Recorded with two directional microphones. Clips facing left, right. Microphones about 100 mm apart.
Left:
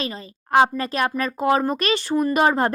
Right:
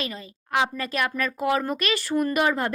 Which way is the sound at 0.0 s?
30° left (ahead or behind).